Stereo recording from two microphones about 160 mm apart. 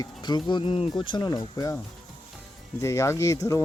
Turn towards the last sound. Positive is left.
turn(degrees=20)  # may be behind; listen again after turning